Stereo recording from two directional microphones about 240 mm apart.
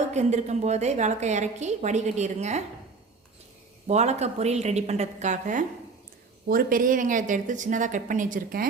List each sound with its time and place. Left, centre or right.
0.1 s a woman's voice: right
3.8 s a woman's voice: right